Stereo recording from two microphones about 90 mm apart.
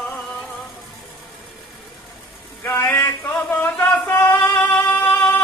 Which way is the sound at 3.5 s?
20° left (ahead or behind).